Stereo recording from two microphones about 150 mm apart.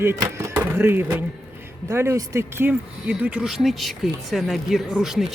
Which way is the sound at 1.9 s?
20° right (ahead or behind).